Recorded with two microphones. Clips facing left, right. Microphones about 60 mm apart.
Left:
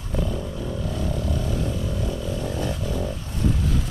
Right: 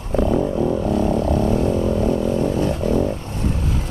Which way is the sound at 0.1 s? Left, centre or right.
Right.